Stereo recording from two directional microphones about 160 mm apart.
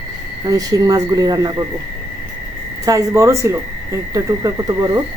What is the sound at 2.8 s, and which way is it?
Speech, 20° right (ahead or behind).